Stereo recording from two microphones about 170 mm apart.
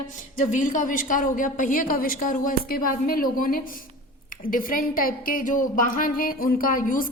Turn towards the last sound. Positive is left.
turn(degrees=55)  # may be behind; listen again after turning